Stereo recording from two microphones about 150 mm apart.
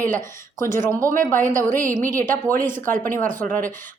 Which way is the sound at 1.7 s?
65° right (ahead or behind).